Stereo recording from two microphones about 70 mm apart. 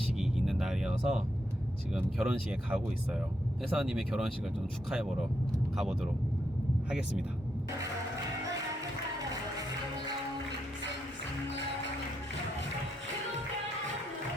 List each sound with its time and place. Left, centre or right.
0.2 s music: centre
2.1 s speech: centre